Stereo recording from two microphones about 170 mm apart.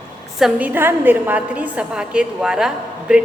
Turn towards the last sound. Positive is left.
turn(degrees=-5)  # may be behind; listen again after turning